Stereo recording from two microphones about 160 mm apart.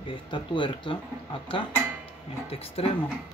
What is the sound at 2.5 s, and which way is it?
Speech, 35° left (ahead or behind).